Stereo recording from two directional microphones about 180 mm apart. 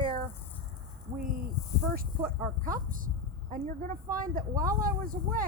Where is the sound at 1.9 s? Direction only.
50° right (ahead or behind).